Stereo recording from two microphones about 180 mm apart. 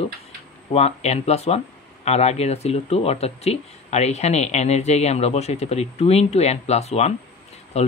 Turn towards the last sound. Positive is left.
turn(degrees=35)  # may be behind; listen again after turning